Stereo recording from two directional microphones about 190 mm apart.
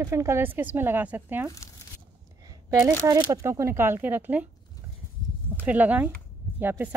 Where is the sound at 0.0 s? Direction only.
15° right (ahead or behind).